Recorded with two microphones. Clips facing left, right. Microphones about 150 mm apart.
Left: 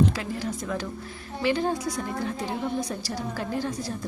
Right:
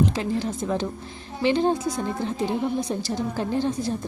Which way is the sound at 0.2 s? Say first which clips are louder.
Right 5 dB; 25° right (ahead or behind).